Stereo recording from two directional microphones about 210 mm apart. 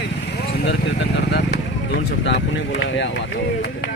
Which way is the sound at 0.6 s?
55° left (ahead or behind).